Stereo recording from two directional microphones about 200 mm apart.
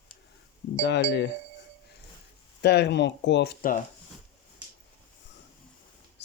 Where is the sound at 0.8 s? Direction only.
65° left (ahead or behind).